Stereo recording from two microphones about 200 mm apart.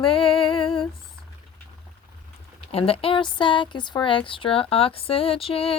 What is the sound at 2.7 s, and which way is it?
Speech, 30° left (ahead or behind).